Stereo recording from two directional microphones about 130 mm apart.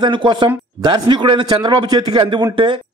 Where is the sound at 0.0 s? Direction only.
35° right (ahead or behind).